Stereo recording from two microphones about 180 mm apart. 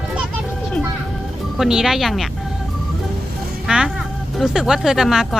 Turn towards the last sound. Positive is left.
turn(degrees=0)  # may be behind; listen again after turning